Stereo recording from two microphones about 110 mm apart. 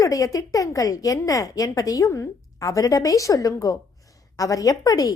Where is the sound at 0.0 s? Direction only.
30° left (ahead or behind).